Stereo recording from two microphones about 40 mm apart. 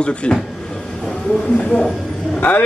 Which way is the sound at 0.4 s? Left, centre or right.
Centre.